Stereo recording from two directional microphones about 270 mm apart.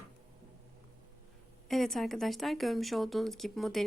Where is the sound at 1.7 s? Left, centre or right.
Centre.